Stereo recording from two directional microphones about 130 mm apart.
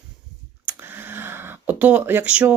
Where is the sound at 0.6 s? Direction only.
15° right (ahead or behind).